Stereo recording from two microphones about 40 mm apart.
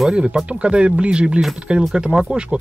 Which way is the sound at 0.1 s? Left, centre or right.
Right.